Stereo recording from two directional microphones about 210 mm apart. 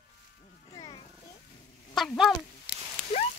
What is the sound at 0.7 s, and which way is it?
Music, 20° left (ahead or behind).